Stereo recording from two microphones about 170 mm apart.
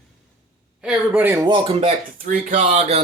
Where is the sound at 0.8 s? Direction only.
10° right (ahead or behind).